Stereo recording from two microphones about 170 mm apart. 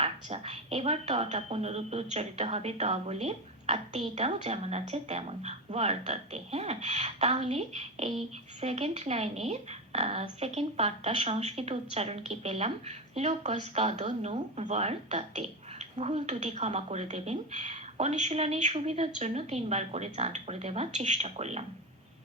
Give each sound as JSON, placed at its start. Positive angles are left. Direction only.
{"t": 0.0, "sound": "a woman's voice", "side_deg": -35}